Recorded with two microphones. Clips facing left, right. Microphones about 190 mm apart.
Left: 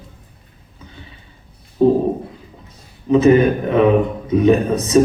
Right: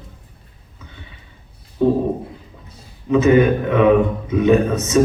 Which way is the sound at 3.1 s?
35° left (ahead or behind).